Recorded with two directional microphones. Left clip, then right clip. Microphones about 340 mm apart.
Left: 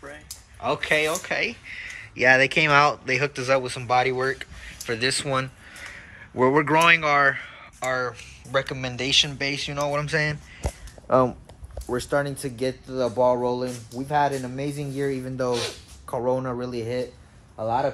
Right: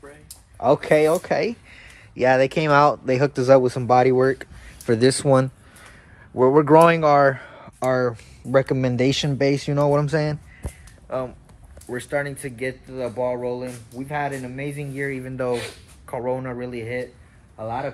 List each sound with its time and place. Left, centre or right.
0.6 s speech: centre
6.3 s speech: centre
11.1 s speech: left
11.9 s speech: centre